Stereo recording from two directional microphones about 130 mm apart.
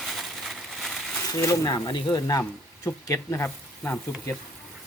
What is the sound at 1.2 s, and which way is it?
Speech, 25° left (ahead or behind).